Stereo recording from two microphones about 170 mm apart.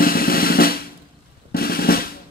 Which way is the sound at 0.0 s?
60° left (ahead or behind).